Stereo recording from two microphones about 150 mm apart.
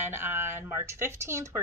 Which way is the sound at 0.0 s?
15° right (ahead or behind).